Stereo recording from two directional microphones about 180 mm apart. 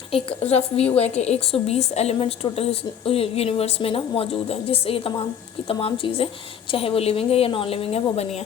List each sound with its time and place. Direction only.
0.1 s a woman's voice: 35° left (ahead or behind)